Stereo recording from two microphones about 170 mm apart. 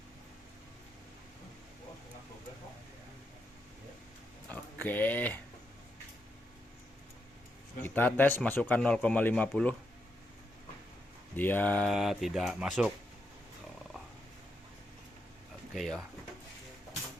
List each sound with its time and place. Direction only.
4.8 s speech: 10° left (ahead or behind)
7.8 s speech: 10° left (ahead or behind)
11.3 s speech: 10° left (ahead or behind)
15.7 s speech: centre (ahead or behind)